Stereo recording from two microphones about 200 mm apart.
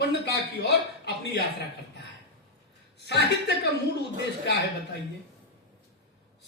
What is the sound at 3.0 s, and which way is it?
Speech, 60° left (ahead or behind).